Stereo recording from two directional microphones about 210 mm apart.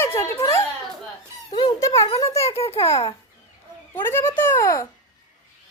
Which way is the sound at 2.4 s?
30° left (ahead or behind).